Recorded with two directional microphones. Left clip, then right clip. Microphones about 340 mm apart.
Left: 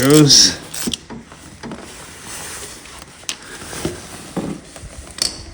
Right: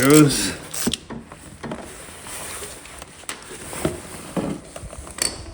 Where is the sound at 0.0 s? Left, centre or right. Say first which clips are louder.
Left 5 dB; centre.